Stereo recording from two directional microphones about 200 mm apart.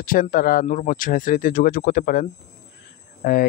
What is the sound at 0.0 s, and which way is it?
Speech, 45° left (ahead or behind).